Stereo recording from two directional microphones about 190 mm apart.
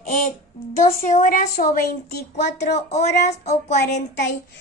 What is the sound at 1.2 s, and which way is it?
A woman's voice, 40° left (ahead or behind).